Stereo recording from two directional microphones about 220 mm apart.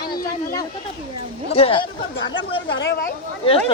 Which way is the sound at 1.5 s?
25° left (ahead or behind).